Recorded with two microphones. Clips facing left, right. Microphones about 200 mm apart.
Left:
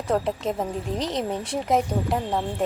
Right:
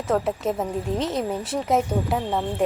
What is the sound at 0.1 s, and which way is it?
A woman's voice, 5° right (ahead or behind).